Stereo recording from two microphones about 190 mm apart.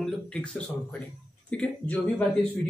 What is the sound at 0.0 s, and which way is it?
Speech, 5° left (ahead or behind).